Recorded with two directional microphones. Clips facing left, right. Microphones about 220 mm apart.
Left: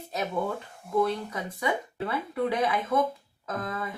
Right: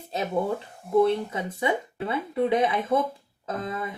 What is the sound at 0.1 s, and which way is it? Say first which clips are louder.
Speech: right 3 dB; 25° right (ahead or behind).